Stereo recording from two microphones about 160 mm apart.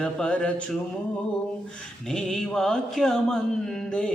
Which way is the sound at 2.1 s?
5° left (ahead or behind).